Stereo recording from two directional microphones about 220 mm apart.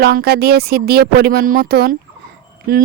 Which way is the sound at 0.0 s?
45° right (ahead or behind).